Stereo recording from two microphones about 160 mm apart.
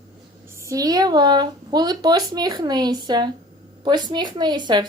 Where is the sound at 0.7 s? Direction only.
25° right (ahead or behind).